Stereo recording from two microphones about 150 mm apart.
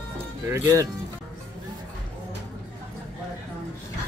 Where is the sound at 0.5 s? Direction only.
20° right (ahead or behind).